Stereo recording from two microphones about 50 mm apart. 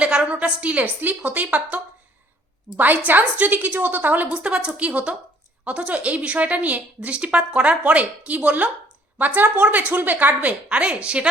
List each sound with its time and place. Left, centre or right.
0.0 s a sound: centre
0.3 s a woman's voice: right
4.3 s a woman's voice: centre
7.2 s a woman's voice: right